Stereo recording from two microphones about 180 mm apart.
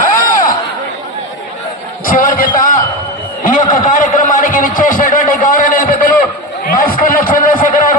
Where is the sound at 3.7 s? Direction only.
45° left (ahead or behind).